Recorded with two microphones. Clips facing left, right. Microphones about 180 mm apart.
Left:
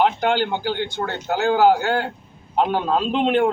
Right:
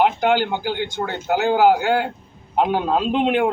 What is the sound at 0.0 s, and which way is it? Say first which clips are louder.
Speech: right 1 dB; 10° right (ahead or behind).